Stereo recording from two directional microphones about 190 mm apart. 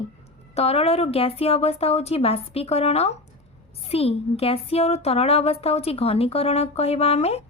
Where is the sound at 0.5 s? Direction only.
35° left (ahead or behind).